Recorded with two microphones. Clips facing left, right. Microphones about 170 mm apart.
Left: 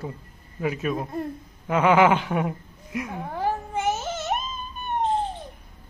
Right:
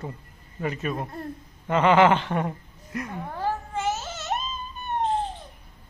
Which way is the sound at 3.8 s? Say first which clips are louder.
Left 3 dB; 15° left (ahead or behind).